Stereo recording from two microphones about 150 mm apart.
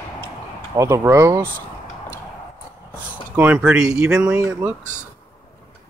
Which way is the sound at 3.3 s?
10° right (ahead or behind).